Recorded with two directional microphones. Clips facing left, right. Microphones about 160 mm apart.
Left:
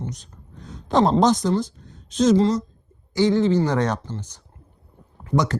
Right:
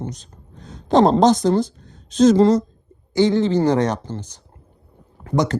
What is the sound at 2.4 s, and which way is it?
Speech, 60° right (ahead or behind).